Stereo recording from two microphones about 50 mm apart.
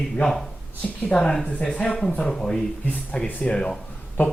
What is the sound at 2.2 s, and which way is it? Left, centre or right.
Speech, centre.